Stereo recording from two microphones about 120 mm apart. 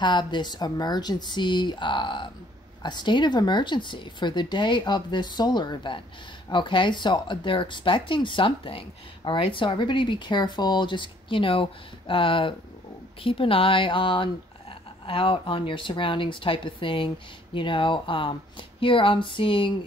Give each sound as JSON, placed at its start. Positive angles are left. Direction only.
{"t": 0.0, "sound": "speech", "side_deg": 40}